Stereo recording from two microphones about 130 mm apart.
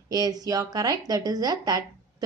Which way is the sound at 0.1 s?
30° right (ahead or behind).